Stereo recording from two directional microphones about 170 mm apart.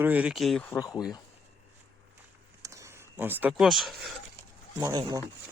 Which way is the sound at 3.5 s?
Centre (ahead or behind).